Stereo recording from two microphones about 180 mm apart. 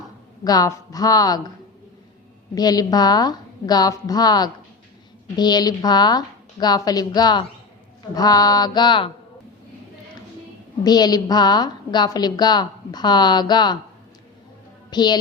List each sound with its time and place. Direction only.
0.4 s a woman's voice: 20° left (ahead or behind)
2.6 s a woman's voice: 20° left (ahead or behind)
10.8 s a woman's voice: 20° left (ahead or behind)
14.8 s a woman's voice: 25° left (ahead or behind)